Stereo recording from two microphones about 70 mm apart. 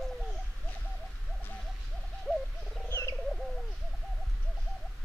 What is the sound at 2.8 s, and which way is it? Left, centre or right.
Bird, left.